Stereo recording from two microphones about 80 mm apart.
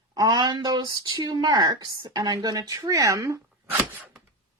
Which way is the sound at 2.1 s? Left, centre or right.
Right.